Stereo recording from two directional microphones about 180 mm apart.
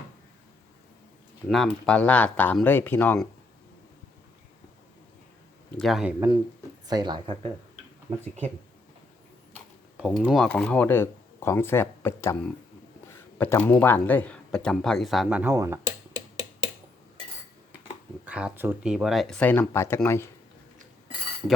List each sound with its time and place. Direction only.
1.5 s speech: centre (ahead or behind)
5.7 s speech: centre (ahead or behind)
6.8 s speech: 25° right (ahead or behind)
10.1 s speech: centre (ahead or behind); by 16.5 s 15° right (ahead or behind)
18.3 s speech: 5° right (ahead or behind); by 20.2 s 15° left (ahead or behind)